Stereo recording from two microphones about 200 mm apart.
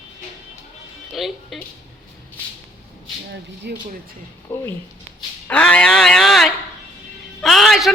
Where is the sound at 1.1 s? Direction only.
Centre (ahead or behind).